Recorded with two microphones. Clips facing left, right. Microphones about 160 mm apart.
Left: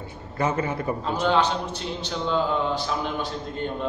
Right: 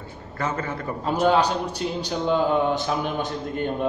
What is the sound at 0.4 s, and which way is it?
Speech, 15° left (ahead or behind).